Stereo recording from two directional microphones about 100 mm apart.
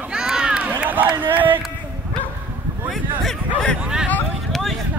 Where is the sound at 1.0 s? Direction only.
55° right (ahead or behind).